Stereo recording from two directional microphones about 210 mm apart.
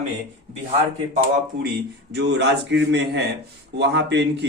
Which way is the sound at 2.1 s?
55° right (ahead or behind).